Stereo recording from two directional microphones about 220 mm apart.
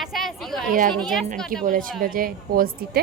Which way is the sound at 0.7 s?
35° right (ahead or behind).